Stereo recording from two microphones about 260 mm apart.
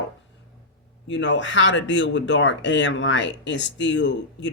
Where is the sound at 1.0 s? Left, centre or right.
Left.